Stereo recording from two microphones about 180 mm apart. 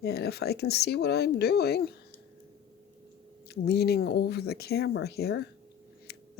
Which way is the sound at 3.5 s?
65° left (ahead or behind).